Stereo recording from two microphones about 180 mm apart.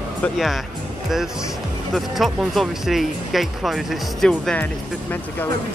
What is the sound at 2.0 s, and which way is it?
Speech, centre (ahead or behind).